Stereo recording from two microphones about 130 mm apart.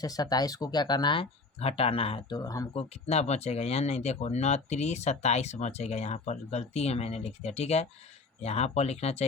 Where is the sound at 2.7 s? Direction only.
55° left (ahead or behind).